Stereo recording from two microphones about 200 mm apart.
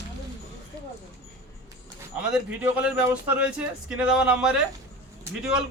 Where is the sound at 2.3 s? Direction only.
5° right (ahead or behind).